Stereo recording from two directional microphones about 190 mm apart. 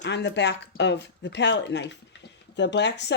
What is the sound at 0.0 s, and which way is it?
A woman's voice, 65° left (ahead or behind).